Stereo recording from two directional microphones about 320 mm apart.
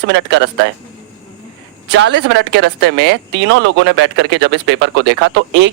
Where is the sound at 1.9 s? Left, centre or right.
Right.